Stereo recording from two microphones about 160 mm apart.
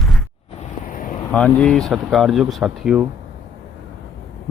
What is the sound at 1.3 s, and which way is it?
Speech, 5° left (ahead or behind).